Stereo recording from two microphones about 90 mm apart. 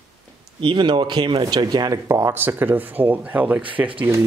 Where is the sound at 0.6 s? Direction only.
60° right (ahead or behind); by 2.3 s 35° right (ahead or behind).